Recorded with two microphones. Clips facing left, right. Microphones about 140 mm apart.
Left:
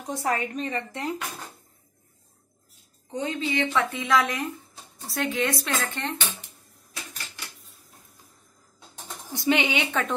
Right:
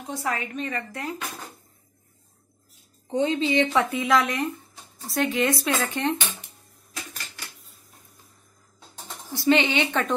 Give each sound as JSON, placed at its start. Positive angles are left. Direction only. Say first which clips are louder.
{"t": 0.1, "sound": "a woman's voice", "louder": "left 2 dB", "side_deg": 40}
{"t": 3.1, "sound": "speech", "louder": "right 6 dB", "side_deg": -25}
{"t": 3.9, "sound": "speech", "louder": "right 2 dB", "side_deg": 0}
{"t": 5.8, "sound": "speech", "louder": "right 5 dB", "side_deg": -15}
{"t": 8.9, "sound": "speech", "louder": "right 1 dB", "side_deg": 15}